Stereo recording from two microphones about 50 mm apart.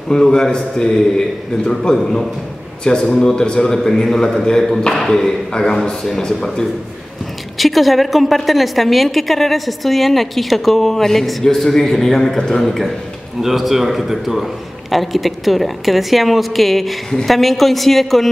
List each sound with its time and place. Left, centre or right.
0.1 s a man's voice: centre
2.8 s a man's voice: centre